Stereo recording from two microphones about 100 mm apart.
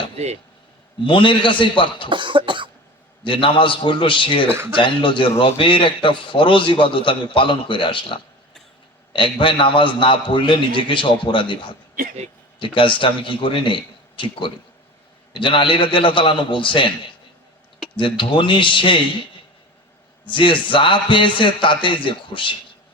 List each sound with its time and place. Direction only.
1.0 s a man's voice: 55° left (ahead or behind)
2.0 s cough: 55° right (ahead or behind)
3.2 s a man's voice: 55° left (ahead or behind)
4.4 s speech: 25° right (ahead or behind)
4.7 s a man's voice: 55° left (ahead or behind)
17.9 s a man's voice: 55° left (ahead or behind)
20.2 s a man's voice: 55° left (ahead or behind)